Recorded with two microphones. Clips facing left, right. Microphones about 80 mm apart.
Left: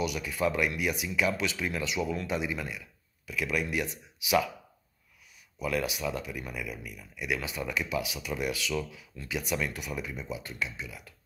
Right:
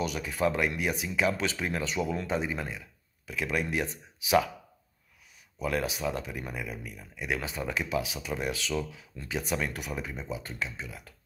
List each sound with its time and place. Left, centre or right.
0.0 s speech: right
5.6 s speech: right